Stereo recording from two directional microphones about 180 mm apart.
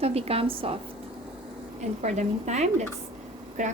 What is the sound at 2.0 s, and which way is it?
A woman's voice, 40° right (ahead or behind).